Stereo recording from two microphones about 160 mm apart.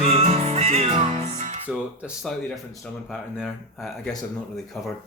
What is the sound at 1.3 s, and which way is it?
Music, 45° right (ahead or behind).